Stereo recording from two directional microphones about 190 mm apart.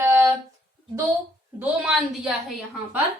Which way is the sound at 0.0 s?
10° right (ahead or behind).